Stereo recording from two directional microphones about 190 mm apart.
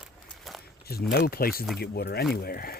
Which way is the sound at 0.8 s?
55° left (ahead or behind).